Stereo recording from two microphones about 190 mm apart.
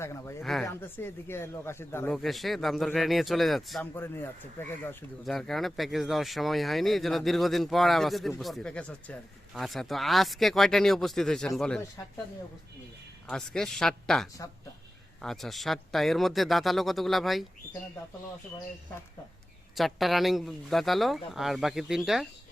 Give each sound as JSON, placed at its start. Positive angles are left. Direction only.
{"t": 0.0, "sound": "speech", "side_deg": 15}
{"t": 0.4, "sound": "speech", "side_deg": 0}
{"t": 0.7, "sound": "speech", "side_deg": 10}
{"t": 2.1, "sound": "speech", "side_deg": 0}
{"t": 3.9, "sound": "speech", "side_deg": 10}
{"t": 13.2, "sound": "speech", "side_deg": 5}
{"t": 19.7, "sound": "speech", "side_deg": 0}